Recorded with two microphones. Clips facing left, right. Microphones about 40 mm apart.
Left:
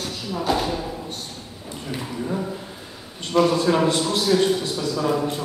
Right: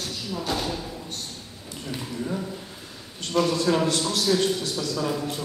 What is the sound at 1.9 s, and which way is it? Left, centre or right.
A man's voice, centre.